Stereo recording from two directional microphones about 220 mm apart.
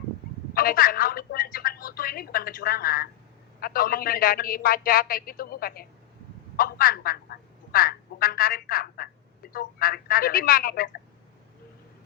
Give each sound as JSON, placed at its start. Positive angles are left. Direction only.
{"t": 0.5, "sound": "a woman's voice", "side_deg": 40}